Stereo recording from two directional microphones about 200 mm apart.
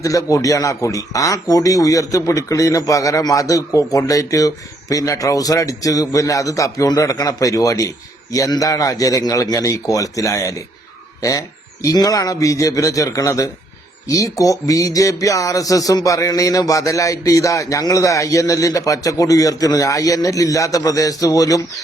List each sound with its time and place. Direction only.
0.0 s a man's voice: 15° left (ahead or behind)